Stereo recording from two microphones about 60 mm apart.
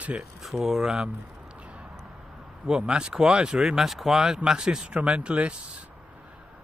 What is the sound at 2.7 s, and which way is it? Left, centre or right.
Speech, centre.